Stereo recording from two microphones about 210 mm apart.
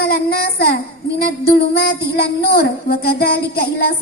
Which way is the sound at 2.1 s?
45° left (ahead or behind).